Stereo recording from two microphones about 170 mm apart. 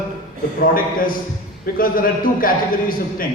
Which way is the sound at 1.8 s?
55° left (ahead or behind).